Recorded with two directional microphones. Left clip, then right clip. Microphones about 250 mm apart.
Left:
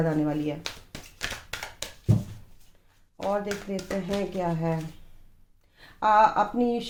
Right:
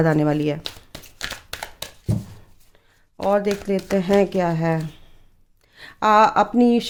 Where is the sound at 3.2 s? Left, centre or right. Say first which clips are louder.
Right 9 dB; right.